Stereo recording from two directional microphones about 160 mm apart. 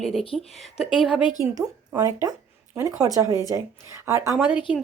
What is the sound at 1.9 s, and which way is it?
Speech, 20° right (ahead or behind).